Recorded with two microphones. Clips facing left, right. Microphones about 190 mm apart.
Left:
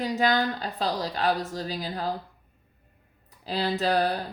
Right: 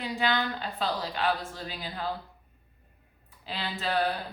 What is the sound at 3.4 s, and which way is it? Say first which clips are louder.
Speech: left 8 dB; 40° left (ahead or behind).